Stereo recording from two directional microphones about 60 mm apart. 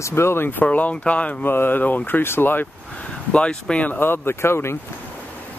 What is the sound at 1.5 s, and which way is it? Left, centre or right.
Speech, left.